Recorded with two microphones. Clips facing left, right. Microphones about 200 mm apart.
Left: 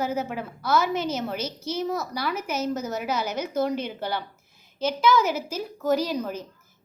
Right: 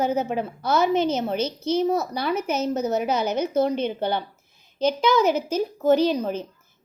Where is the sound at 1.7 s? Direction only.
30° right (ahead or behind).